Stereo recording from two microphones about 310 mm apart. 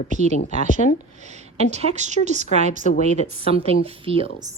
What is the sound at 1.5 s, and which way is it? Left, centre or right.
A woman's voice, right.